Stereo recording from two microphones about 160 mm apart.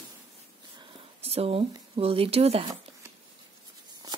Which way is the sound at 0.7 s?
35° right (ahead or behind).